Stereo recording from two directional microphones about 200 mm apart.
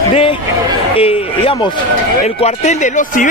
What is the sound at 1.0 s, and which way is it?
Speech, 30° left (ahead or behind).